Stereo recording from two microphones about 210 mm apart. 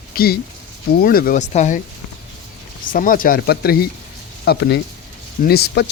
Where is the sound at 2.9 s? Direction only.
40° left (ahead or behind).